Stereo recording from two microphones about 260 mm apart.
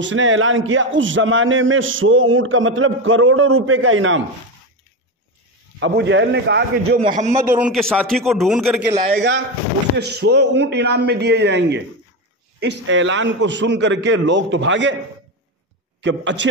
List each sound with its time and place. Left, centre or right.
0.0 s a man's voice: right
5.8 s a man's voice: right
7.0 s a man's voice: right
7.5 s a man's voice: centre
9.1 s a man's voice: right
16.0 s a man's voice: right